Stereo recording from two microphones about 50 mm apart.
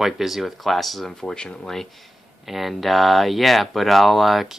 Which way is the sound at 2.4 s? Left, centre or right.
Centre.